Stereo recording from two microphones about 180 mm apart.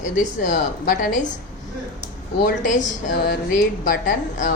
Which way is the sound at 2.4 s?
45° left (ahead or behind).